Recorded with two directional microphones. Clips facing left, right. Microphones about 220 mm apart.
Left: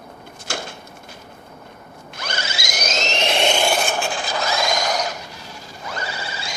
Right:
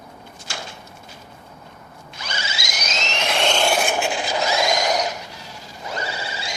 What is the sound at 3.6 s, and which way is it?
Filing, 5° right (ahead or behind).